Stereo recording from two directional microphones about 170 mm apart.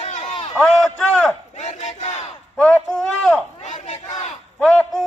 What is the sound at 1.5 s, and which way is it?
Battle cry, 40° left (ahead or behind).